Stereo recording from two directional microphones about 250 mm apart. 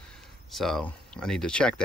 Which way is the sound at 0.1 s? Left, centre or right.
Centre.